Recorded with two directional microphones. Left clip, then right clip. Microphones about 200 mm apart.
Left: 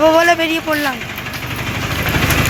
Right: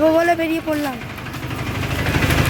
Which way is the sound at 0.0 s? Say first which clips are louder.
Left 4 dB; 5° right (ahead or behind).